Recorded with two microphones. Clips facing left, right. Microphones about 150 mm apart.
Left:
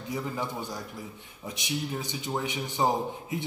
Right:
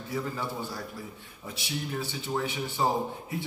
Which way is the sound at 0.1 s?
15° left (ahead or behind).